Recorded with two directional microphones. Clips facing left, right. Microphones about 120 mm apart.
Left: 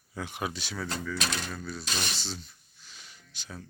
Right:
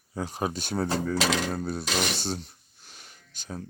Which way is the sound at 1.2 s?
90° right.